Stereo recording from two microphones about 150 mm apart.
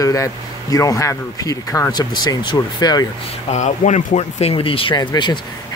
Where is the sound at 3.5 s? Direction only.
50° left (ahead or behind).